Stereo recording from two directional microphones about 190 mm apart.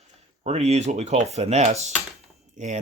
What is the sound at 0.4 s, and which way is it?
Speech, 35° right (ahead or behind).